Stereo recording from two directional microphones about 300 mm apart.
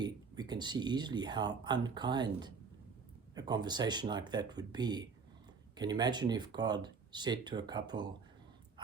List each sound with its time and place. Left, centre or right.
0.0 s speech: centre